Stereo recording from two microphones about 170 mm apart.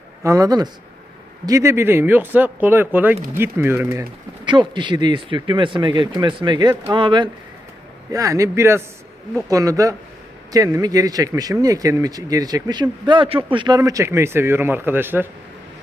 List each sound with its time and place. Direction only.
0.2 s speech: 20° right (ahead or behind)
4.4 s speech: 25° right (ahead or behind); by 15.3 s 10° right (ahead or behind)